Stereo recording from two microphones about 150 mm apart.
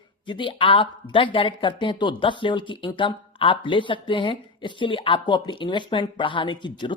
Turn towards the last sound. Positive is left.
turn(degrees=30)  # may be behind; listen again after turning